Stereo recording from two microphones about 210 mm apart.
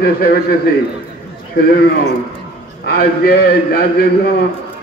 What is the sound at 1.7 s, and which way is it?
A man's voice, 45° left (ahead or behind).